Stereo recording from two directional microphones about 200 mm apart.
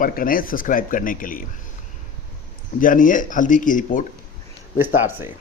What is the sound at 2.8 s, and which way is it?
Speech, 40° left (ahead or behind).